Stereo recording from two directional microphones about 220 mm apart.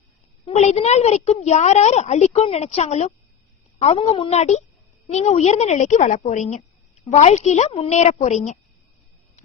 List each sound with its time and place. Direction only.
0.4 s a woman's voice: 30° left (ahead or behind)